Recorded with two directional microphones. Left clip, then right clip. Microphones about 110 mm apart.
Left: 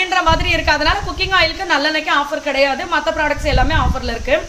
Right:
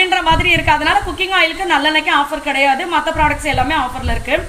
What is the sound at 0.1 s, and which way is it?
A woman's voice, 35° left (ahead or behind).